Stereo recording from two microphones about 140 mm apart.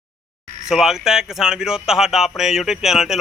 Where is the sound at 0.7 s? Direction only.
5° right (ahead or behind).